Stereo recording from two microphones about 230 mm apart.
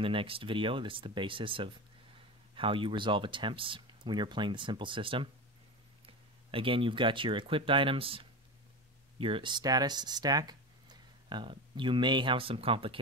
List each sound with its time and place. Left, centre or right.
0.0 s speech: right